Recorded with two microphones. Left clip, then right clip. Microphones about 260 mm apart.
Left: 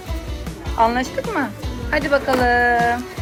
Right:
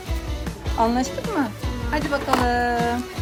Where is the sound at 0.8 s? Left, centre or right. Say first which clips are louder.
Left 4 dB; centre.